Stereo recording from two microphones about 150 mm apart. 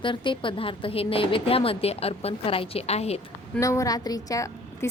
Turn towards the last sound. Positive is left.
turn(degrees=25)  # may be behind; listen again after turning